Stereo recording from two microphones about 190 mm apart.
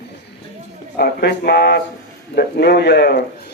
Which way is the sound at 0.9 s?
55° left (ahead or behind).